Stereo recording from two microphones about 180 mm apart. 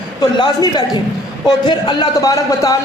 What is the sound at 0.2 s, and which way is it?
A man's voice, 25° left (ahead or behind).